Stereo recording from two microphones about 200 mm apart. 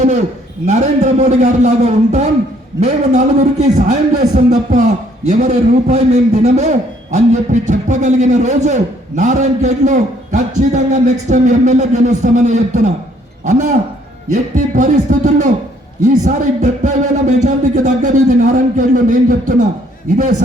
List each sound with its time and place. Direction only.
0.6 s a man's voice: 35° right (ahead or behind)